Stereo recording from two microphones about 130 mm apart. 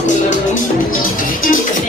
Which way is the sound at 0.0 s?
70° left (ahead or behind).